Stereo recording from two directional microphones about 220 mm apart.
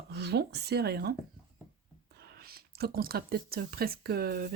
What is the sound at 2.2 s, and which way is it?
Speech, 45° right (ahead or behind).